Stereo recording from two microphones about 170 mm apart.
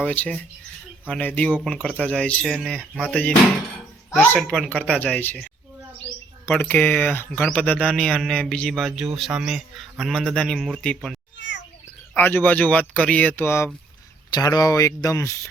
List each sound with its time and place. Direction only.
0.0 s speech: 10° left (ahead or behind)
6.5 s speech: 10° left (ahead or behind)
11.3 s a sound: 90° left
12.1 s speech: 10° left (ahead or behind)